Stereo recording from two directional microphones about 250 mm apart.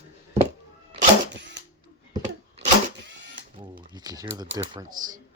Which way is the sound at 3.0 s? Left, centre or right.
Right.